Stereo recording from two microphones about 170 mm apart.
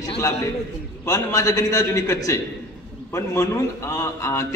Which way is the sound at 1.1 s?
20° left (ahead or behind).